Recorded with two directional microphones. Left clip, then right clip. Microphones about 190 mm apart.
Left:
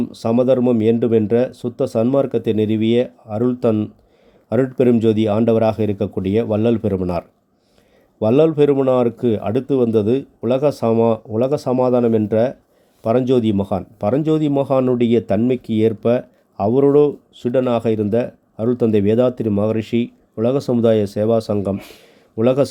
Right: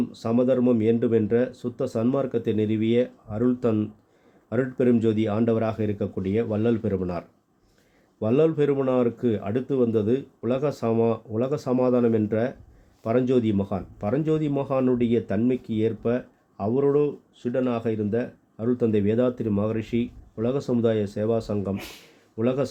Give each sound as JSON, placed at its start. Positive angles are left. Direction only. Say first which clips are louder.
{"t": 0.0, "sound": "speech", "louder": "left 7 dB", "side_deg": 30}